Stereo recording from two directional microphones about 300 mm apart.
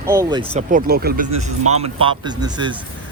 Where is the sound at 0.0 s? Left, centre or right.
Centre.